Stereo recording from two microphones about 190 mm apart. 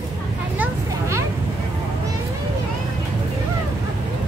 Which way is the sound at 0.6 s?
15° right (ahead or behind).